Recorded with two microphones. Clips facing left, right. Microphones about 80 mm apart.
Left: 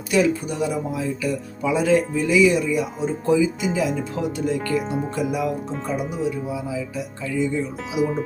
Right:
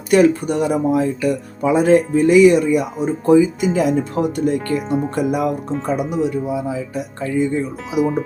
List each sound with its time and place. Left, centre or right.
0.1 s speech: right
3.2 s speech: right
5.8 s speech: right
7.9 s speech: centre